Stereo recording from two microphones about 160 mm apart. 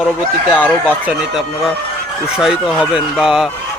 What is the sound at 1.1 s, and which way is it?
Speech, 5° right (ahead or behind).